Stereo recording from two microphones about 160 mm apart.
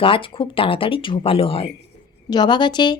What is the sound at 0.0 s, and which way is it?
Speech, 35° left (ahead or behind).